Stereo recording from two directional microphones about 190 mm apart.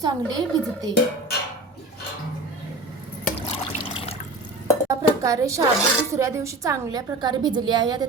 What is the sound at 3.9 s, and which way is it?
Water, 30° left (ahead or behind).